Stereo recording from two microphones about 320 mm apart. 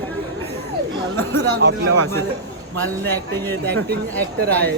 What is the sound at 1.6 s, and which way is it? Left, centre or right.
Speech, right.